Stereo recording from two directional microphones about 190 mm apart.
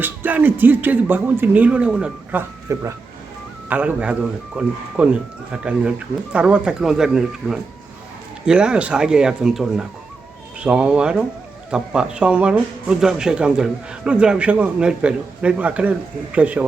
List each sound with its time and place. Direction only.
0.0 s speech: 10° right (ahead or behind)